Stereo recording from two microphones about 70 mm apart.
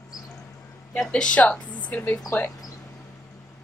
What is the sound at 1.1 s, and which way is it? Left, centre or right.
Speech, centre.